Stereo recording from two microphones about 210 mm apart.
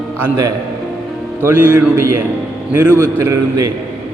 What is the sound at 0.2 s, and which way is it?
A man's voice, 15° right (ahead or behind).